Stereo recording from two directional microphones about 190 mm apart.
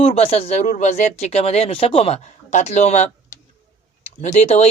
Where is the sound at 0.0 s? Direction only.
30° left (ahead or behind).